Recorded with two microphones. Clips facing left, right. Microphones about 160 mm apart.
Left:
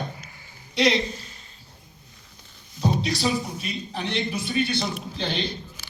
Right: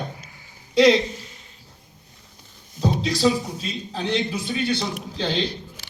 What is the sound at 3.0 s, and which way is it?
Speech, 90° right.